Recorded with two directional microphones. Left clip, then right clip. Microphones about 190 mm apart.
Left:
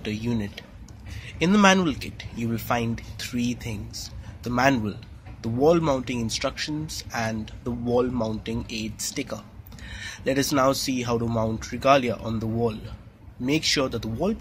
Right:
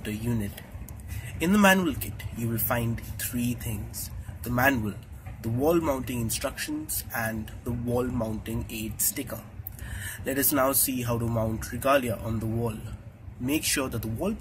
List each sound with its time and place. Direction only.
0.0 s speech: 40° left (ahead or behind)